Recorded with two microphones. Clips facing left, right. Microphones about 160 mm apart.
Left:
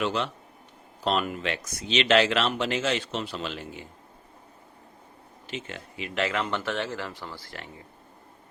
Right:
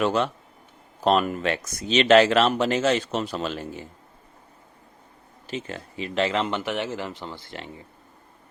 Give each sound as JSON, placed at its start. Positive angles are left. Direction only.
{"t": 0.0, "sound": "speech", "side_deg": -45}
{"t": 5.5, "sound": "speech", "side_deg": -35}